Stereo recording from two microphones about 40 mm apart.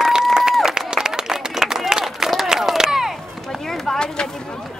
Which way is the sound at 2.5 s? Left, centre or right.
Centre.